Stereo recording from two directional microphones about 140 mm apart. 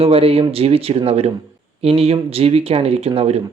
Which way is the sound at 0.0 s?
45° right (ahead or behind).